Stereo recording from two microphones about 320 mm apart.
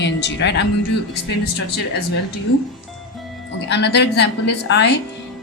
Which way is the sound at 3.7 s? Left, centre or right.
Left.